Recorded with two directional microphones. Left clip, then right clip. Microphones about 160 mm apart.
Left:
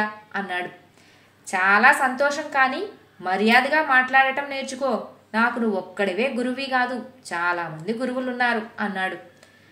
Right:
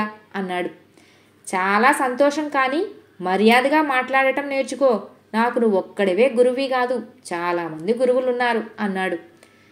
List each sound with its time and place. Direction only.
0.0 s music: 30° right (ahead or behind)
1.4 s a woman's voice: 30° right (ahead or behind)